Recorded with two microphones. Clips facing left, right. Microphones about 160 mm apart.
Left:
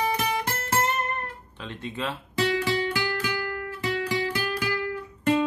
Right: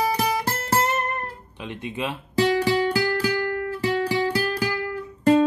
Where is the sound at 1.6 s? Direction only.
15° right (ahead or behind).